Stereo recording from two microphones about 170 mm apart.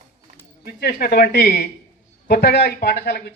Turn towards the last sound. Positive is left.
turn(degrees=65)  # may be behind; listen again after turning